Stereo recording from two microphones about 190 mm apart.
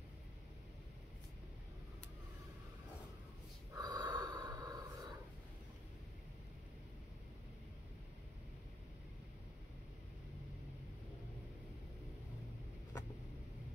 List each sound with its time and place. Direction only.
3.7 s snort: 20° right (ahead or behind)